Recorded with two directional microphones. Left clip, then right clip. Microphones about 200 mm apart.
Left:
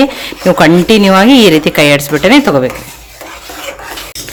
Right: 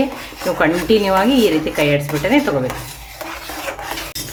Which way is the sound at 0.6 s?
45° left (ahead or behind).